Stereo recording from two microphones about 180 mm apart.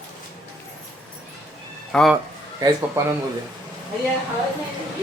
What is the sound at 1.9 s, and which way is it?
Speech, centre (ahead or behind).